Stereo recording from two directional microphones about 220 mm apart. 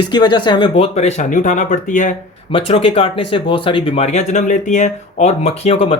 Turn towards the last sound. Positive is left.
turn(degrees=25)  # may be behind; listen again after turning